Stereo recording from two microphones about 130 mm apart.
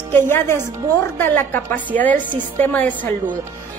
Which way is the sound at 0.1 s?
20° left (ahead or behind).